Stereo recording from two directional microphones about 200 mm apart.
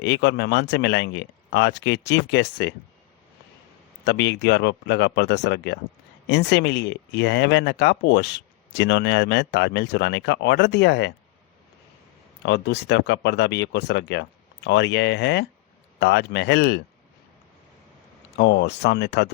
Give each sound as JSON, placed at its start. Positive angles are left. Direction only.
{"t": 0.0, "sound": "speech", "side_deg": 60}
{"t": 4.0, "sound": "speech", "side_deg": 60}
{"t": 12.4, "sound": "speech", "side_deg": 60}
{"t": 18.3, "sound": "speech", "side_deg": 60}